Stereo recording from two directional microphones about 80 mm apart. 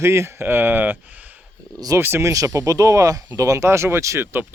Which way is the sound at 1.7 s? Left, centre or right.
Right.